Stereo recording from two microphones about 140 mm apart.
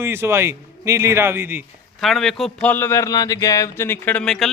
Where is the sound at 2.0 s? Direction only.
Centre (ahead or behind).